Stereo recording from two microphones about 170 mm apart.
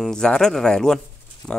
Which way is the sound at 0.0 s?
5° left (ahead or behind).